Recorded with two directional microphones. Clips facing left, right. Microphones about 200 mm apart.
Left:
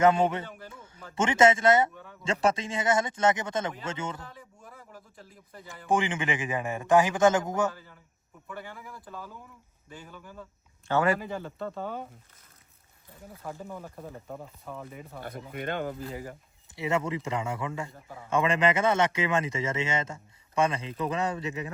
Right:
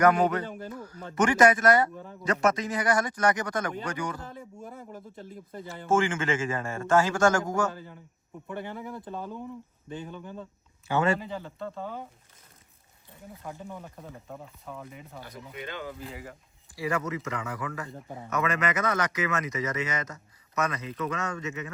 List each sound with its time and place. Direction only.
0.0 s speech: 25° left (ahead or behind)
0.7 s a sound: 25° left (ahead or behind)
1.1 s speech: 25° left (ahead or behind)
4.3 s speech: 25° right (ahead or behind)
5.9 s a man's voice: 20° left (ahead or behind)
7.7 s speech: 25° right (ahead or behind)
10.9 s a man's voice: 15° right (ahead or behind)
11.6 s speech: 60° left (ahead or behind)
13.4 s speech: centre (ahead or behind)
15.2 s speech: 55° left (ahead or behind)
16.0 s speech: 30° left (ahead or behind)